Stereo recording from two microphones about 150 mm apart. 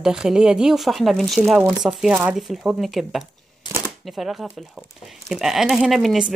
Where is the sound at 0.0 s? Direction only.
5° right (ahead or behind).